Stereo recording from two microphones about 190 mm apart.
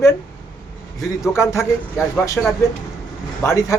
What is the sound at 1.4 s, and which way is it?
Speech, 15° left (ahead or behind).